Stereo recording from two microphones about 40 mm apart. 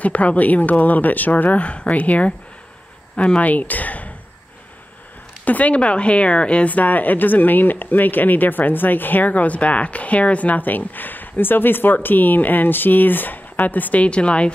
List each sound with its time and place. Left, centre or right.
0.0 s speech: left
5.4 s a woman's voice: left
6.7 s speech: left
14.0 s a woman's voice: left